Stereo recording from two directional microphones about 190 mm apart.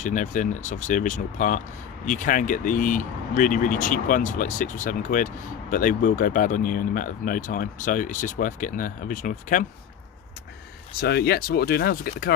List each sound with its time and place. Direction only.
0.0 s speech: 40° left (ahead or behind)
11.0 s speech: 55° left (ahead or behind)